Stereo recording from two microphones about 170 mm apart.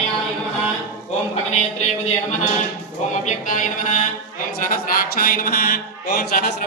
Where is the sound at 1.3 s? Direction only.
40° left (ahead or behind).